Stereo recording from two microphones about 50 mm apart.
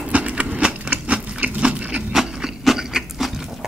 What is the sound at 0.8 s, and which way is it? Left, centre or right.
Sewing machine, right.